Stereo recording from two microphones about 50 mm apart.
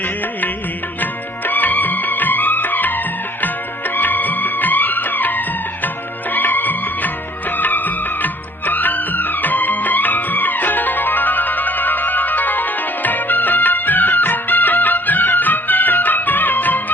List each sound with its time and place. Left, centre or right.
1.5 s music: left